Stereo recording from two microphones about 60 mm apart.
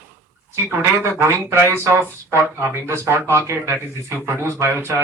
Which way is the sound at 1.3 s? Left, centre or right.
Right.